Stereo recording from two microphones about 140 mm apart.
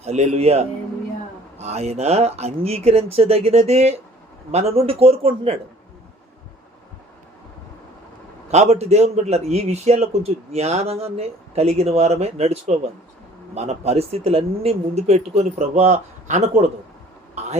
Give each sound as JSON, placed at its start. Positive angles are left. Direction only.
{"t": 0.0, "sound": "a man's voice", "side_deg": -50}
{"t": 8.4, "sound": "a man's voice", "side_deg": -50}
{"t": 17.4, "sound": "a sound", "side_deg": -50}